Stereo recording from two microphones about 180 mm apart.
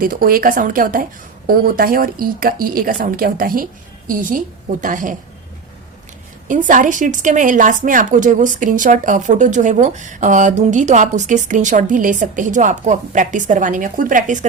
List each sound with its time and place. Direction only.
0.0 s speech: 50° right (ahead or behind)
6.5 s speech: 45° right (ahead or behind)